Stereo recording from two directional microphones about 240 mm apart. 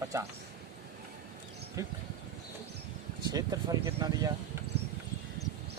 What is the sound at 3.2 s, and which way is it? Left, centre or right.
Speech, centre.